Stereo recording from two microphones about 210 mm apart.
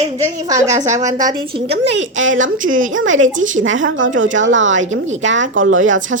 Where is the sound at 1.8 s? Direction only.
60° right (ahead or behind).